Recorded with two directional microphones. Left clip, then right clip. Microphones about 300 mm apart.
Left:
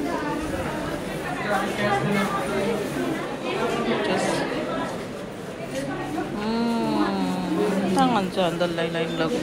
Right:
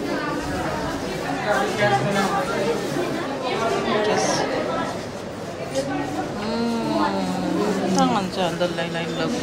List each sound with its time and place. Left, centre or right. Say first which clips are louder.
8.0 s speech: left 1 dB; centre